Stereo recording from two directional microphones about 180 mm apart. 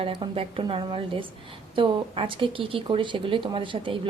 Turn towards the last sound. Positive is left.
turn(degrees=-30)  # may be behind; listen again after turning